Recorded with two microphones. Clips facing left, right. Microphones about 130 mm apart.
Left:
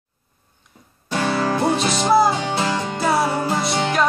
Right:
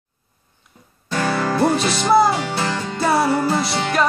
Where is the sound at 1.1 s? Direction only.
20° left (ahead or behind).